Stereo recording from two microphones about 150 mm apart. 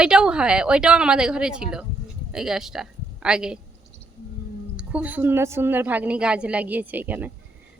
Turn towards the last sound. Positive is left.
turn(degrees=-10)  # may be behind; listen again after turning